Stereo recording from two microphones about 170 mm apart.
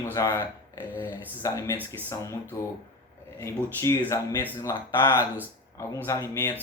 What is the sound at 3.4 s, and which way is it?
Speech, 15° left (ahead or behind).